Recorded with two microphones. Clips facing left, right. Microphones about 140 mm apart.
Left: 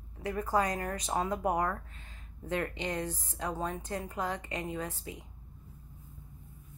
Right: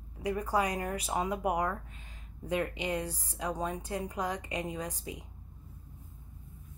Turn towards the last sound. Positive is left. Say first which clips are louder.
# even
turn(degrees=-15)  # may be behind; listen again after turning